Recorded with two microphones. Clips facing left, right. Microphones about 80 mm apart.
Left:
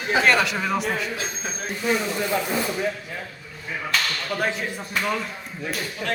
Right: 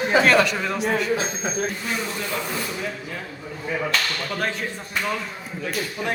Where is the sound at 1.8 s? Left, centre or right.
Centre.